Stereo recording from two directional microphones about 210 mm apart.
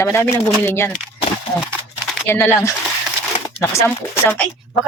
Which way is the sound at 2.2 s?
10° left (ahead or behind).